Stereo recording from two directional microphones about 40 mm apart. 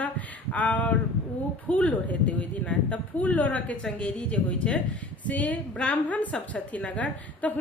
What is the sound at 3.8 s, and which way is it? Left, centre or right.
A woman's voice, left.